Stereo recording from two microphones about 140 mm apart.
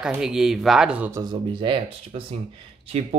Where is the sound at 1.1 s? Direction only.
30° right (ahead or behind).